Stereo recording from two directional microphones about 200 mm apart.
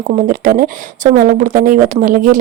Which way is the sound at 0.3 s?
45° right (ahead or behind).